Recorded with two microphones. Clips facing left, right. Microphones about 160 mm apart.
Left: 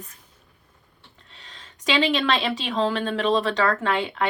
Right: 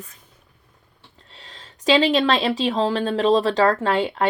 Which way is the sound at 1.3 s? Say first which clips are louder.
Right 3 dB; 30° right (ahead or behind).